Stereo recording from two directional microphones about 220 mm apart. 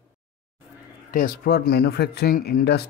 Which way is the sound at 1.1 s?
40° left (ahead or behind).